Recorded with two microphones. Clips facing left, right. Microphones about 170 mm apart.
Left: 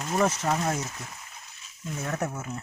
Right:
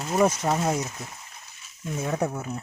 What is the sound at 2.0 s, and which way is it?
Speech, 10° right (ahead or behind).